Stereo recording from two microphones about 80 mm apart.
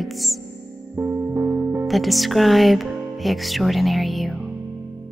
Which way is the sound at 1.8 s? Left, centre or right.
Centre.